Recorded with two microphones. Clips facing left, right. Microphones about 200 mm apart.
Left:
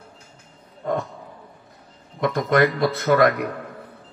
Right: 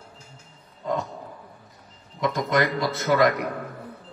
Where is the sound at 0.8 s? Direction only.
55° left (ahead or behind).